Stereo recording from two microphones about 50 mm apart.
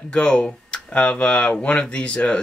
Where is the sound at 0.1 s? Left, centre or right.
Left.